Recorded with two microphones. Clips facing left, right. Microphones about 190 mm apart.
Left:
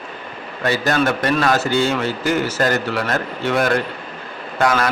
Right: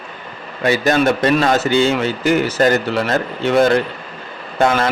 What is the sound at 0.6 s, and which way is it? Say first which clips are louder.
Speech: right 3 dB; 15° right (ahead or behind).